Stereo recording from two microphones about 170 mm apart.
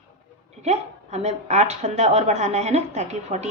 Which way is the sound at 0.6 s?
40° right (ahead or behind).